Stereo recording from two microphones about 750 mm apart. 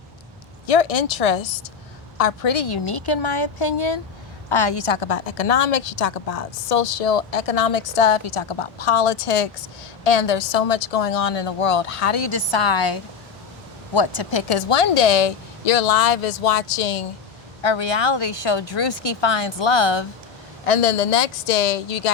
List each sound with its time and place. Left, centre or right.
0.7 s a woman's voice: left
4.9 s a woman's voice: left
13.9 s a woman's voice: left
17.6 s speech: left
20.7 s speech: left